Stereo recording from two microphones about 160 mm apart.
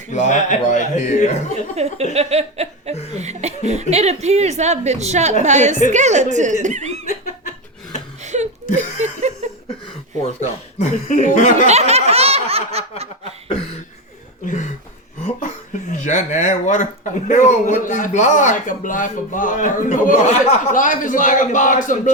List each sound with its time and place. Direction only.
0.1 s speech: 50° left (ahead or behind)
1.7 s a sound: 40° right (ahead or behind)
2.1 s speech: 40° right (ahead or behind)
8.2 s a sound: 45° right (ahead or behind)
9.0 s chuckle: 45° right (ahead or behind)
10.4 s speech: 50° left (ahead or behind)
11.6 s snicker: 40° right (ahead or behind)
13.5 s cough: 35° left (ahead or behind)
14.4 s a sound: 50° left (ahead or behind)
17.2 s speech: 50° left (ahead or behind)